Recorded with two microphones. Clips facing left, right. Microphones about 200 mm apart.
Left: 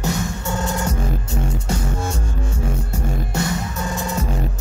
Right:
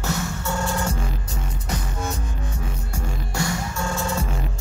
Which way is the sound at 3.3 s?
20° left (ahead or behind).